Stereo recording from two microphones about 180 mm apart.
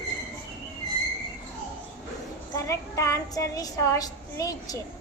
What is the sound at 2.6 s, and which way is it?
A woman's voice, 15° left (ahead or behind).